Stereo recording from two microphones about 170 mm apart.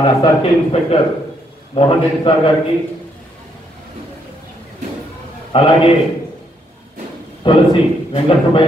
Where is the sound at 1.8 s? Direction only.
30° left (ahead or behind).